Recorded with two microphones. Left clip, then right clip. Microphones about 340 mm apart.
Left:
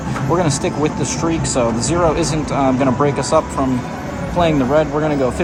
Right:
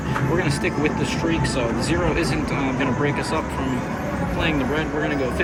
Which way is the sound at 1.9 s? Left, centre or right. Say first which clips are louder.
Left 5 dB; centre.